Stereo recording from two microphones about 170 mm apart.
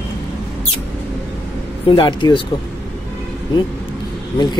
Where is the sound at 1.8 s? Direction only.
30° left (ahead or behind).